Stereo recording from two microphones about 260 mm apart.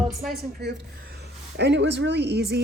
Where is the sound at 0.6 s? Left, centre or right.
Right.